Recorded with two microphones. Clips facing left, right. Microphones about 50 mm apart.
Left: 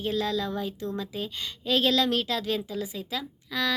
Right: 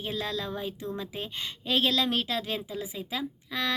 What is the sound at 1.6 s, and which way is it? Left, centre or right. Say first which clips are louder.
A woman's voice: left 3 dB; centre.